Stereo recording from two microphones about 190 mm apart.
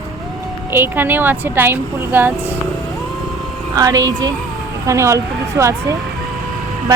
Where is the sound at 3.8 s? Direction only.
20° right (ahead or behind).